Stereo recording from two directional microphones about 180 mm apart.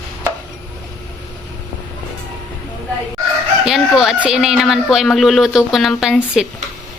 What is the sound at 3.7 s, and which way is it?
Speech, centre (ahead or behind).